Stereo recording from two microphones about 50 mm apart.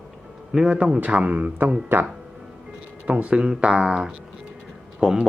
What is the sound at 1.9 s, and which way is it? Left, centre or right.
Speech, right.